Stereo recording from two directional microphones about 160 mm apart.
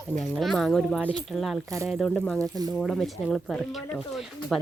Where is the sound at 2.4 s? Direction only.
25° right (ahead or behind).